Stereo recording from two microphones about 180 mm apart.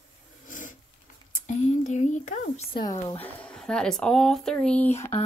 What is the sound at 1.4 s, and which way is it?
Speech, 40° left (ahead or behind).